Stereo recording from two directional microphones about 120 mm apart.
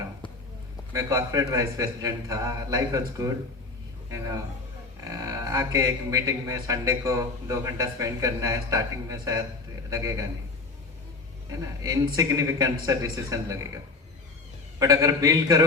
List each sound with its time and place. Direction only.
0.9 s a man's voice: 30° right (ahead or behind)
4.1 s a man's voice: 25° right (ahead or behind)
11.8 s a man's voice: 30° right (ahead or behind)
14.8 s a man's voice: 30° right (ahead or behind)